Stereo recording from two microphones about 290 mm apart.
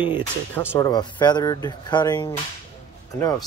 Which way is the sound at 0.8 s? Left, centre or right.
Centre.